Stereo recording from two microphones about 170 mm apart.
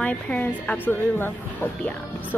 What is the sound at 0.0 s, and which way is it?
Speech, 10° left (ahead or behind).